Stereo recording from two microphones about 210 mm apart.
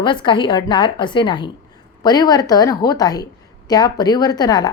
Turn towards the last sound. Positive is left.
turn(degrees=20)  # may be behind; listen again after turning